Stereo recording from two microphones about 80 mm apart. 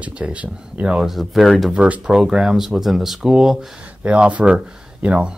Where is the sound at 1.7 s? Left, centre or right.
Centre.